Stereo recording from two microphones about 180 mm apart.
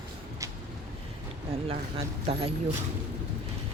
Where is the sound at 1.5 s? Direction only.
30° right (ahead or behind).